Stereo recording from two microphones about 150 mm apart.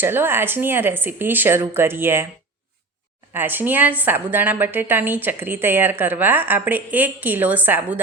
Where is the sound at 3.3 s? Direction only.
15° right (ahead or behind).